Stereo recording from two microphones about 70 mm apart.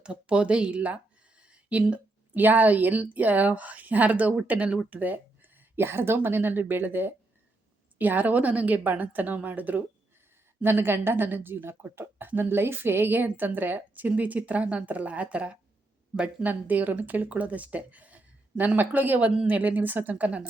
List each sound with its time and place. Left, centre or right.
0.0 s speech: centre